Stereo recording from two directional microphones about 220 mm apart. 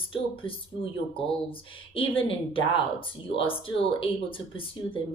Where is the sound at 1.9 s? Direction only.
25° left (ahead or behind).